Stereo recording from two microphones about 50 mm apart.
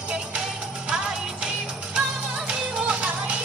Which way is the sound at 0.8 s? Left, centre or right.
Centre.